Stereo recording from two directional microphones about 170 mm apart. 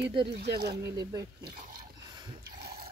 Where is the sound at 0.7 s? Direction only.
25° right (ahead or behind).